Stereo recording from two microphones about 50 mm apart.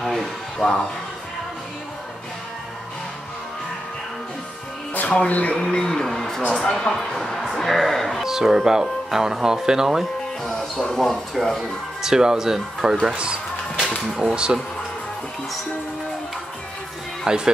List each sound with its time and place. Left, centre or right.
0.6 s speech: centre
5.3 s speech: left
5.6 s a sound: centre
6.5 s speech: centre
8.2 s speech: centre
10.4 s speech: centre
11.4 s speech: centre
13.1 s a sound: centre
14.2 s speech: centre
17.3 s speech: centre